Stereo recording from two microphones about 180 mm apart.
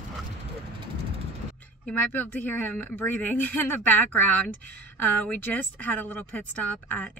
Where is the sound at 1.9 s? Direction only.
10° left (ahead or behind).